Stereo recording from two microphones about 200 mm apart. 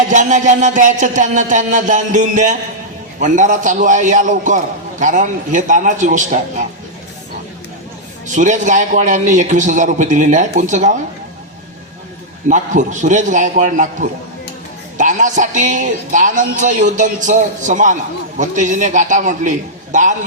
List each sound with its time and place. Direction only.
0.1 s a man's voice: 40° right (ahead or behind)
8.4 s a man's voice: 40° right (ahead or behind)
12.5 s a man's voice: 40° right (ahead or behind)